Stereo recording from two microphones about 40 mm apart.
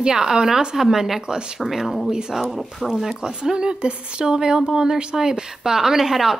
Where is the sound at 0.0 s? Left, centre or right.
Centre.